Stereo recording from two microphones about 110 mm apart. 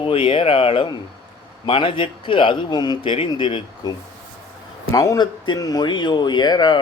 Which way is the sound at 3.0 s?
55° left (ahead or behind).